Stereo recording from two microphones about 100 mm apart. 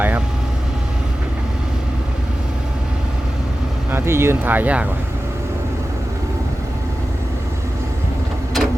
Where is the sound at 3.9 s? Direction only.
25° right (ahead or behind).